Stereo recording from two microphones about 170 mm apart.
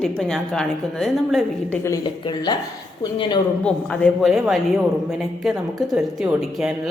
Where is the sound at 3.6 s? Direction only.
5° left (ahead or behind).